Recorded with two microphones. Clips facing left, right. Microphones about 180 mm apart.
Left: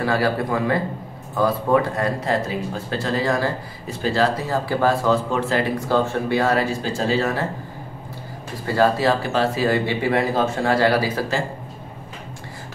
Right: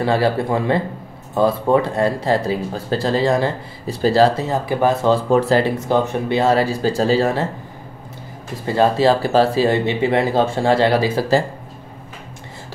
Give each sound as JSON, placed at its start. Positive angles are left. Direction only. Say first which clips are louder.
{"t": 0.0, "sound": "speech", "louder": "right 3 dB", "side_deg": -25}
{"t": 4.5, "sound": "speech", "louder": "right 2 dB", "side_deg": -20}
{"t": 5.1, "sound": "speech", "louder": "right 6 dB", "side_deg": -35}
{"t": 5.8, "sound": "speech", "louder": "right 2 dB", "side_deg": -20}
{"t": 8.6, "sound": "speech", "louder": "right 3 dB", "side_deg": -25}